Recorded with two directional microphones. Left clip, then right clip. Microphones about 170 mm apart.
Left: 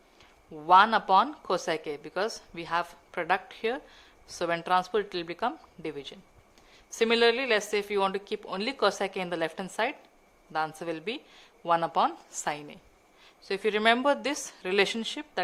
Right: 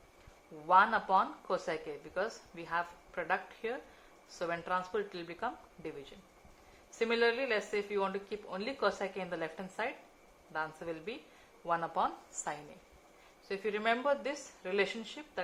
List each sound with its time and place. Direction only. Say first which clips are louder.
0.7 s a woman's voice: left 7 dB; 65° left (ahead or behind)
13.5 s a woman's voice: left 9 dB; 70° left (ahead or behind)